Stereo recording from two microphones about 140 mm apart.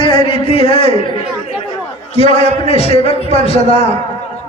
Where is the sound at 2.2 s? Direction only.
45° left (ahead or behind).